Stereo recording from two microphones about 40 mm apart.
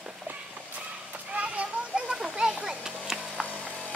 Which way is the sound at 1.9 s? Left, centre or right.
Centre.